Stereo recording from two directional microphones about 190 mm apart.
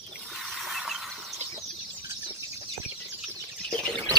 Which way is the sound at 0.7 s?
Centre (ahead or behind).